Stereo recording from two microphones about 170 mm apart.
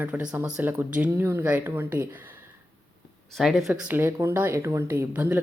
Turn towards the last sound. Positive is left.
turn(degrees=-10)  # may be behind; listen again after turning